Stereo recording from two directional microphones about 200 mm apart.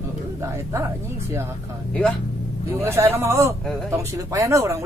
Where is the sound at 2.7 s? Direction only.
15° right (ahead or behind).